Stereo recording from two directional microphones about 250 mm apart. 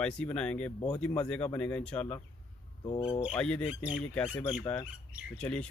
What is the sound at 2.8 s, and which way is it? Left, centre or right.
Speech, left.